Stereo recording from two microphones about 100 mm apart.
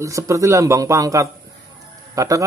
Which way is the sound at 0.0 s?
30° right (ahead or behind).